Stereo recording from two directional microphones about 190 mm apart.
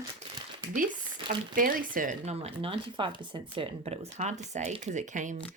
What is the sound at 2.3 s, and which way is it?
Speech, 30° right (ahead or behind).